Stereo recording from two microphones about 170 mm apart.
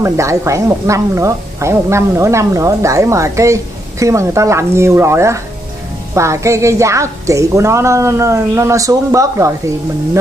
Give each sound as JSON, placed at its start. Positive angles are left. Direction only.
{"t": 0.0, "sound": "a woman's voice", "side_deg": -15}